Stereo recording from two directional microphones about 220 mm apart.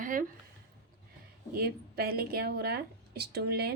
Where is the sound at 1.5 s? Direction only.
45° right (ahead or behind).